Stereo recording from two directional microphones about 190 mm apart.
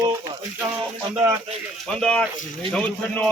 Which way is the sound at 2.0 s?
5° left (ahead or behind).